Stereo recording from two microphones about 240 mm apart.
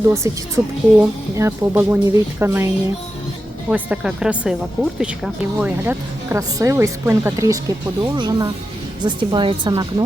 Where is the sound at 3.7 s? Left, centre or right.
Centre.